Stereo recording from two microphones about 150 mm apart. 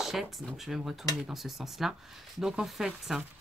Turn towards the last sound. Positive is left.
turn(degrees=0)  # may be behind; listen again after turning